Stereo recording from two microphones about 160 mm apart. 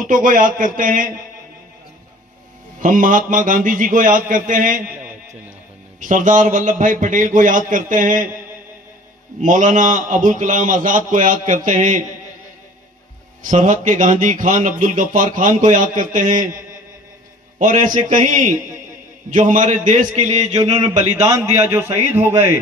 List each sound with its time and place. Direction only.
0.0 s a man's voice: 55° right (ahead or behind)
2.8 s a man's voice: 55° right (ahead or behind)
5.9 s a man's voice: 55° right (ahead or behind)
9.4 s speech: 50° right (ahead or behind)
13.4 s speech: 55° right (ahead or behind)
20.5 s a sound: 25° right (ahead or behind)
21.2 s a man's voice: 15° right (ahead or behind)